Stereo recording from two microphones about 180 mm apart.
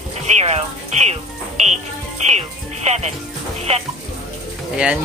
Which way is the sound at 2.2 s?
40° right (ahead or behind).